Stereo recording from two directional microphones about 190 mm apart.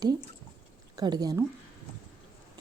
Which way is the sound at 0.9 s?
20° right (ahead or behind).